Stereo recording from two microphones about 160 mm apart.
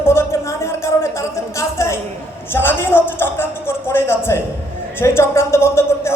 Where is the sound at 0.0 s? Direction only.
15° left (ahead or behind).